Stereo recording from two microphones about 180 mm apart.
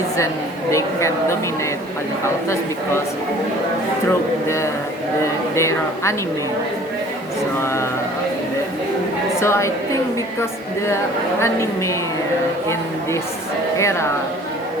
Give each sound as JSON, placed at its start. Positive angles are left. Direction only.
{"t": 0.7, "sound": "a woman's voice", "side_deg": 15}
{"t": 4.4, "sound": "a woman's voice", "side_deg": 15}
{"t": 7.6, "sound": "a woman's voice", "side_deg": 15}
{"t": 9.4, "sound": "a woman's voice", "side_deg": 15}
{"t": 10.8, "sound": "a woman's voice", "side_deg": 15}
{"t": 13.7, "sound": "a woman's voice", "side_deg": 15}